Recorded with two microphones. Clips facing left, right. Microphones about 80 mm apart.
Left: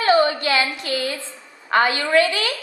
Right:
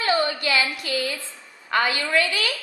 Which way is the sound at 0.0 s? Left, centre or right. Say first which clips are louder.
Left 6 dB; left.